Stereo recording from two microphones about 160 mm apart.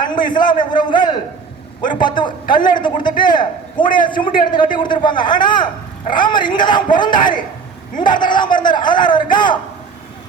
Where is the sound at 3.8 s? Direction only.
60° left (ahead or behind).